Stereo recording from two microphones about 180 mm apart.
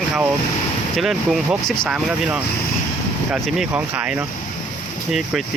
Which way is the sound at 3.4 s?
5° right (ahead or behind).